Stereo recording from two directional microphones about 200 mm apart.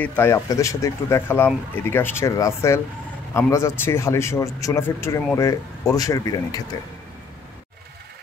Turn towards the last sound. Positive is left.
turn(degrees=20)  # may be behind; listen again after turning